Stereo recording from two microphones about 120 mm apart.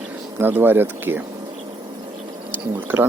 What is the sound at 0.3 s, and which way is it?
Speech, 15° right (ahead or behind).